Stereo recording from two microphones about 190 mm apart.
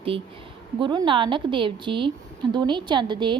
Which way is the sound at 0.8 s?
25° right (ahead or behind).